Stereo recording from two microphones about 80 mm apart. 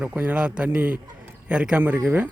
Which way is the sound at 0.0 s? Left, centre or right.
Right.